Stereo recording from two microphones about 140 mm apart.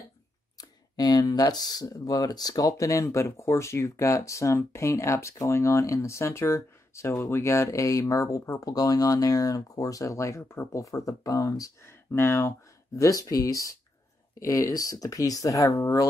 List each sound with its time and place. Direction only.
0.6 s speech: 25° left (ahead or behind)